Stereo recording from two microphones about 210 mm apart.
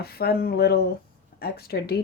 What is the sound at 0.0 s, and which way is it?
Speech, 45° left (ahead or behind).